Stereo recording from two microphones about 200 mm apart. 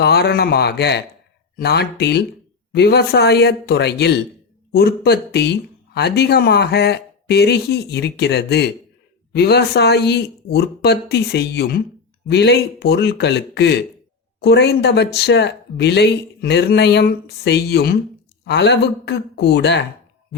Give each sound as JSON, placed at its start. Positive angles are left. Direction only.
{"t": 0.0, "sound": "speech", "side_deg": 55}